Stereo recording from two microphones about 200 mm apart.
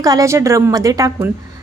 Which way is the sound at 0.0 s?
15° right (ahead or behind).